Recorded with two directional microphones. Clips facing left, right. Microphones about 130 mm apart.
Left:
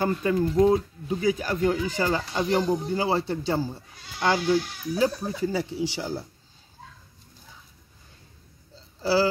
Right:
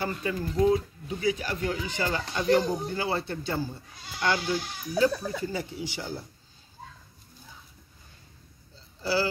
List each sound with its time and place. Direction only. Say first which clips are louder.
0.0 s speech: left 6 dB; 45° left (ahead or behind)
0.6 s speech: left 1 dB; 30° left (ahead or behind)
1.2 s speech: left 4 dB; 45° left (ahead or behind)
9.0 s speech: left 5 dB; 35° left (ahead or behind)